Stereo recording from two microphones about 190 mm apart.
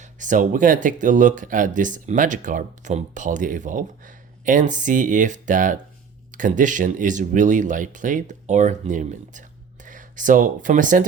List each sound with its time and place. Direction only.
0.0 s speech: 40° right (ahead or behind)